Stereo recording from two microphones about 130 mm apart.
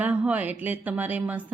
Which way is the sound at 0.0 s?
10° right (ahead or behind).